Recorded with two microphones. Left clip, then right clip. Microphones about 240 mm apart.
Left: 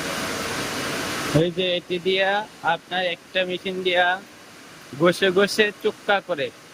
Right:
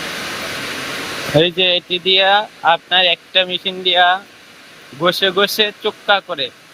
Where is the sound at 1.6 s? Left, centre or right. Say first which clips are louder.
Right 8 dB; centre.